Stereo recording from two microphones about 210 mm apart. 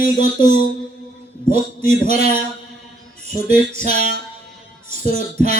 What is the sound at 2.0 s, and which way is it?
Music, 40° left (ahead or behind).